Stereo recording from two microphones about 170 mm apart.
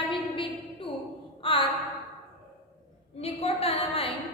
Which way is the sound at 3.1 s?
35° left (ahead or behind).